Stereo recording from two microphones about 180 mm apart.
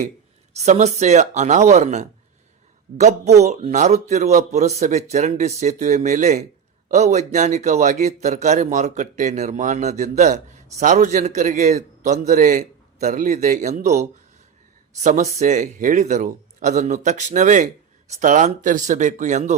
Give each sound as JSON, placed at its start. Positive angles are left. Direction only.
{"t": 0.5, "sound": "a man's voice", "side_deg": -40}